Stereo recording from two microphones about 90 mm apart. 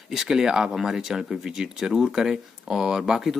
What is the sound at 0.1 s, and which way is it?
Speech, 5° right (ahead or behind).